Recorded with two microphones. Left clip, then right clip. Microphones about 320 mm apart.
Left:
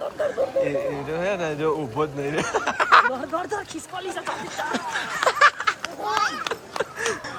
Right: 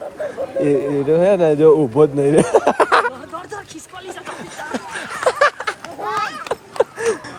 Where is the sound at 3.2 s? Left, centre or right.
Left.